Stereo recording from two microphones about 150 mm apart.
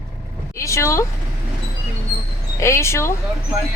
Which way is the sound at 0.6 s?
20° left (ahead or behind).